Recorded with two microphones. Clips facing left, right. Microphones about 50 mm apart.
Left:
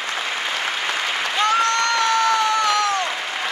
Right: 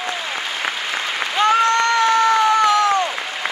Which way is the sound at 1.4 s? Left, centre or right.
Right.